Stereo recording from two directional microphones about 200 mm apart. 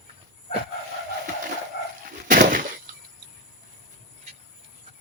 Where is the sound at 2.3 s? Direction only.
40° right (ahead or behind).